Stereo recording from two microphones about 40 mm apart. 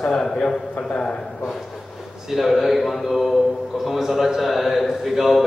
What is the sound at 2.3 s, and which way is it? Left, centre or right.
A man's voice, centre.